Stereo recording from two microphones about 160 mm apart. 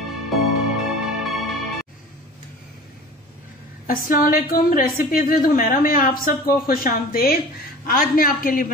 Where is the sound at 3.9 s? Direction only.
60° left (ahead or behind).